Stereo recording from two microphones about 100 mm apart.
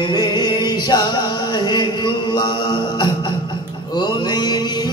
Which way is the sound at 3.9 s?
45° left (ahead or behind).